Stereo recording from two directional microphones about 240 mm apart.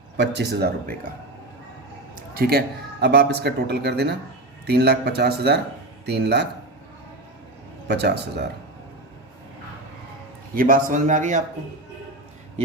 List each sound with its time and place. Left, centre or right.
0.2 s speech: right
2.3 s speech: right
7.9 s speech: right
10.5 s a man's voice: right